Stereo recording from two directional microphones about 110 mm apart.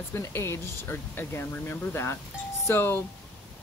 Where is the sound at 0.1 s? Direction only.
25° left (ahead or behind).